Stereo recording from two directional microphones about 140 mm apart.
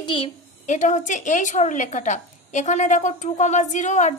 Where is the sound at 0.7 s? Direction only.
60° left (ahead or behind).